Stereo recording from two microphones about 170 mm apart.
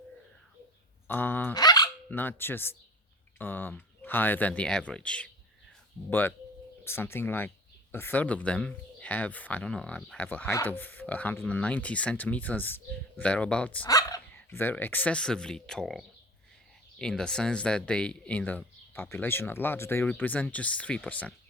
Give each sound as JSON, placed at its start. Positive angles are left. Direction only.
{"t": 1.0, "sound": "speech", "side_deg": 10}
{"t": 1.5, "sound": "a sound", "side_deg": 25}
{"t": 2.0, "sound": "speech", "side_deg": 10}
{"t": 13.8, "sound": "speech", "side_deg": 20}